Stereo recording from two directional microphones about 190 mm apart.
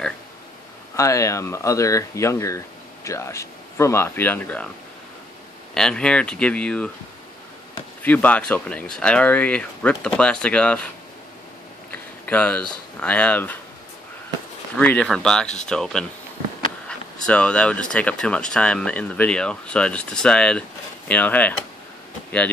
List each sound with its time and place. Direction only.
0.9 s speech: 15° left (ahead or behind)
5.8 s speech: 5° left (ahead or behind)
8.0 s speech: 10° left (ahead or behind)
11.9 s a sound: 10° left (ahead or behind)
13.0 s speech: 5° left (ahead or behind)
14.8 s speech: 5° left (ahead or behind)